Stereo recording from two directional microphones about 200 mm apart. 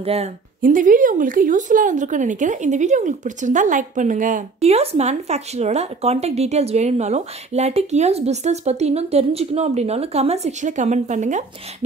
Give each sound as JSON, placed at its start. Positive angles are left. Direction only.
{"t": 0.0, "sound": "a woman's voice", "side_deg": -30}
{"t": 0.6, "sound": "speech", "side_deg": -40}